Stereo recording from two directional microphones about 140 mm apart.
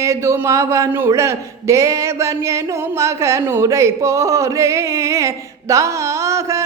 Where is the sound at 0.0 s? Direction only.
20° right (ahead or behind).